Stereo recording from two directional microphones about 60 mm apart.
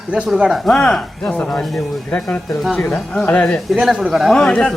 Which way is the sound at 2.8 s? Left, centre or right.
Centre.